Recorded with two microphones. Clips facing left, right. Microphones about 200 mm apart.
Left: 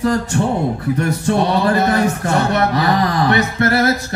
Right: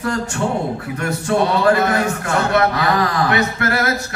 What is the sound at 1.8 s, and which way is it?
Speech, 35° left (ahead or behind).